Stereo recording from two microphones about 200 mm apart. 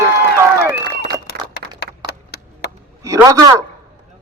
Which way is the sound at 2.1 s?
55° left (ahead or behind).